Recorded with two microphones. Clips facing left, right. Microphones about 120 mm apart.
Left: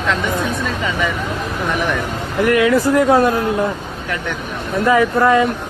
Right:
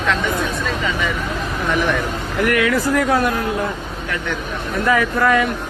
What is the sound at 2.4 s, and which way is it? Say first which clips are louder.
Speech: left 4 dB; 20° left (ahead or behind).